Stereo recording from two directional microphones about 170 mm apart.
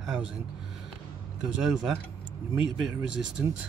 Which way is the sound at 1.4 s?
5° right (ahead or behind).